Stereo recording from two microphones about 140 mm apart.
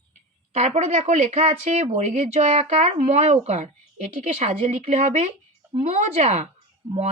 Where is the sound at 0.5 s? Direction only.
55° right (ahead or behind).